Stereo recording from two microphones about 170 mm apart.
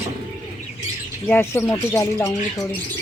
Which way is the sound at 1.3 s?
15° left (ahead or behind).